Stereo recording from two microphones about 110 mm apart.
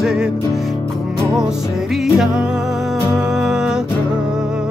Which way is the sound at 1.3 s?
5° right (ahead or behind).